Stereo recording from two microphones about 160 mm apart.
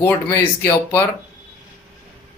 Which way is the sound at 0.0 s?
15° left (ahead or behind).